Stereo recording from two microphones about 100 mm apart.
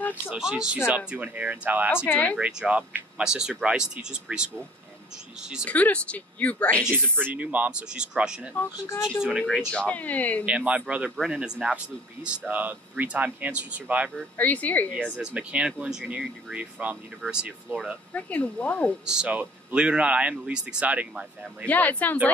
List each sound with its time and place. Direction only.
0.3 s speech: 5° right (ahead or behind)
2.0 s speech: 15° left (ahead or behind)
2.4 s speech: 15° right (ahead or behind)
5.7 s speech: 15° left (ahead or behind)
7.2 s speech: 15° right (ahead or behind)
8.5 s speech: 25° left (ahead or behind)
9.7 s speech: 10° left (ahead or behind)
10.4 s speech: 10° right (ahead or behind)
11.1 s speech: centre (ahead or behind)
14.3 s speech: 15° left (ahead or behind)
15.0 s speech: 10° right (ahead or behind)
18.1 s speech: 15° left (ahead or behind)
19.0 s speech: 10° right (ahead or behind)
21.6 s speech: 15° left (ahead or behind)